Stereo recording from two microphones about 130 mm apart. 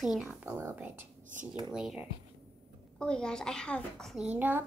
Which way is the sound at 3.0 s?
5° left (ahead or behind).